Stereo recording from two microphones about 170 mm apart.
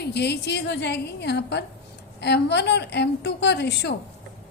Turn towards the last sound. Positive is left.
turn(degrees=80)